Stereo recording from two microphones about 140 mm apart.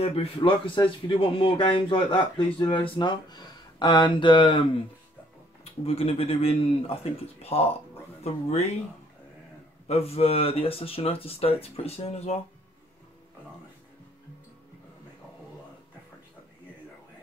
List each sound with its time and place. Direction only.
0.0 s speech: 40° left (ahead or behind)
5.6 s speech: 45° left (ahead or behind)
9.8 s speech: 45° left (ahead or behind)